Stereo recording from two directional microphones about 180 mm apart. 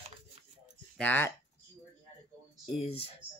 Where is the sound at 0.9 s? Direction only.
10° left (ahead or behind).